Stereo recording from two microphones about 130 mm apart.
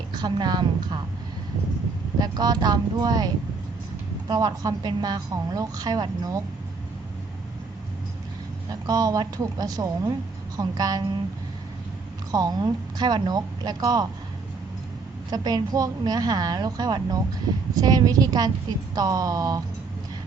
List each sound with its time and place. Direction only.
0.2 s a woman's voice: 35° right (ahead or behind)
2.2 s a woman's voice: 30° right (ahead or behind)
8.7 s a woman's voice: 30° right (ahead or behind)
12.3 s a woman's voice: 30° right (ahead or behind)
15.3 s a woman's voice: 30° right (ahead or behind)